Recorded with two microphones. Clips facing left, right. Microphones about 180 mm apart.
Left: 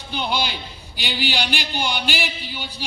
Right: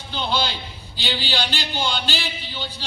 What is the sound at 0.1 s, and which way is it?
A man's voice, 15° left (ahead or behind).